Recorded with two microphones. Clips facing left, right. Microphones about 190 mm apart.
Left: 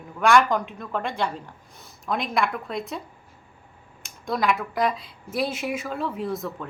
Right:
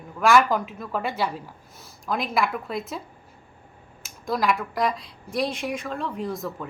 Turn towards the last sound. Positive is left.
turn(degrees=0)  # may be behind; listen again after turning